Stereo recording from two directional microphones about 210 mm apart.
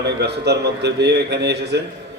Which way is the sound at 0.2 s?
55° right (ahead or behind).